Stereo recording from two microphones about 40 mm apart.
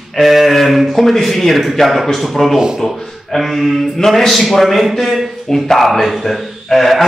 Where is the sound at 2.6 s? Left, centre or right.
Centre.